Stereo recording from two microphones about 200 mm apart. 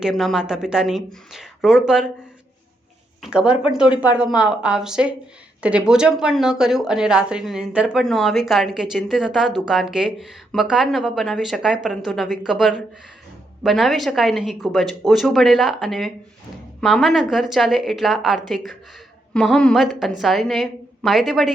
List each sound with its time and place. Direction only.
0.0 s a woman's voice: centre (ahead or behind)
3.2 s a woman's voice: 5° right (ahead or behind)